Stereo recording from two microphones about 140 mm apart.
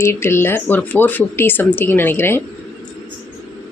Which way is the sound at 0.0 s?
15° left (ahead or behind).